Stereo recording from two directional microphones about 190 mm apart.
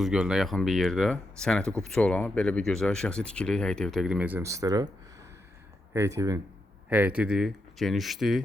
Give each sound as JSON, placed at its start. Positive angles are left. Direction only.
{"t": 0.0, "sound": "speech", "side_deg": -5}
{"t": 5.9, "sound": "speech", "side_deg": -15}